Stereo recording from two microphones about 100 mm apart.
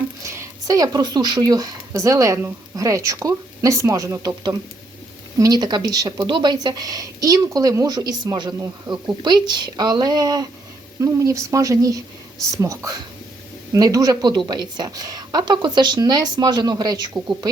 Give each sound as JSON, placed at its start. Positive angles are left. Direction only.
{"t": 0.2, "sound": "a woman's voice", "side_deg": -30}
{"t": 11.0, "sound": "a woman's voice", "side_deg": -30}